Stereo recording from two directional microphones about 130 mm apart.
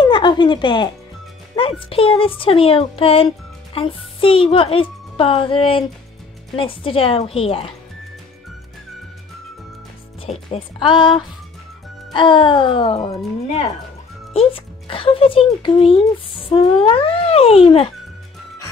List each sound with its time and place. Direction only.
0.0 s a sound: 35° left (ahead or behind)
1.6 s speech: 40° left (ahead or behind)
10.2 s speech: 45° left (ahead or behind)
14.3 s speech: 45° left (ahead or behind)